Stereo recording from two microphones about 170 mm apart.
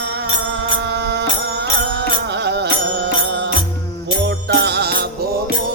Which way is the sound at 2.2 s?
85° right.